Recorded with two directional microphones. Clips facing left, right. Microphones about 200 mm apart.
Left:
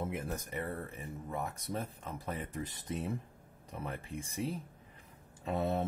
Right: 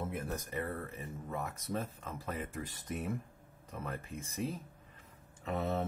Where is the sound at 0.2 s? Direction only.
15° left (ahead or behind).